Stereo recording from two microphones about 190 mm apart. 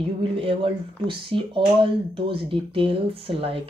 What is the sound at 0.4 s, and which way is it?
Speech, 25° right (ahead or behind).